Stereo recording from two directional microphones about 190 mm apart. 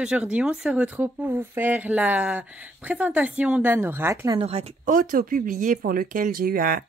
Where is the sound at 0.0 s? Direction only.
5° right (ahead or behind).